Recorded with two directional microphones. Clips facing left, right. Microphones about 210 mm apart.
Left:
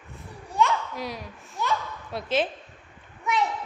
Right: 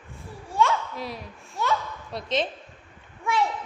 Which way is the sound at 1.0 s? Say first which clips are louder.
Left 1 dB; centre (ahead or behind).